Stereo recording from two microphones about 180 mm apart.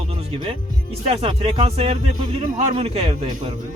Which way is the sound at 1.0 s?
35° right (ahead or behind).